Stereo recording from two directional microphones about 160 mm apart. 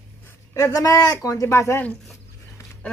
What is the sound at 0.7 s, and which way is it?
Speech, 20° left (ahead or behind).